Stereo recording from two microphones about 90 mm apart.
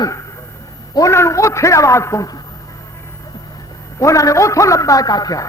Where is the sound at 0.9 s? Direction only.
35° left (ahead or behind).